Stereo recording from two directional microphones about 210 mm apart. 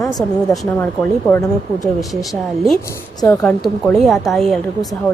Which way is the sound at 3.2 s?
15° left (ahead or behind).